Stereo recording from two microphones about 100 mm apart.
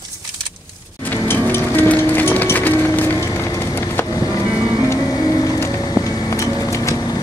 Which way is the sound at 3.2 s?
30° left (ahead or behind).